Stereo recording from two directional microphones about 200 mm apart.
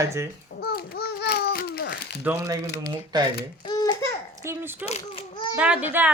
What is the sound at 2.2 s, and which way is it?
Speech, 10° right (ahead or behind).